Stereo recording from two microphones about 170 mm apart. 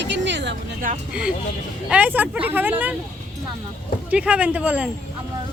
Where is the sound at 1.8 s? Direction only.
5° right (ahead or behind).